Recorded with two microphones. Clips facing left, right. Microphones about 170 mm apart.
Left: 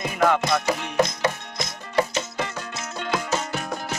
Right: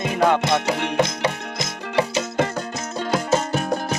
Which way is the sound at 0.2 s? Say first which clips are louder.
Right 2 dB; 25° right (ahead or behind).